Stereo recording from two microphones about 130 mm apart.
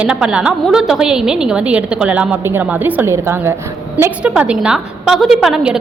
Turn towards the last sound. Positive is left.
turn(degrees=-5)  # may be behind; listen again after turning